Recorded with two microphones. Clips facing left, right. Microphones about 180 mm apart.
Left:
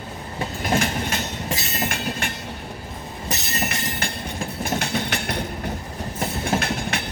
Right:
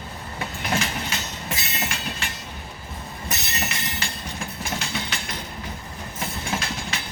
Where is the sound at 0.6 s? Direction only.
50° left (ahead or behind).